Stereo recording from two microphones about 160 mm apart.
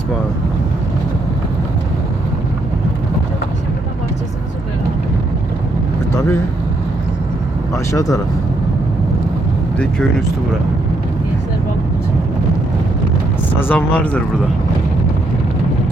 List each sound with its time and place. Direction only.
7.7 s speech: 20° left (ahead or behind)
9.7 s speech: 5° left (ahead or behind)
13.6 s speech: 10° left (ahead or behind)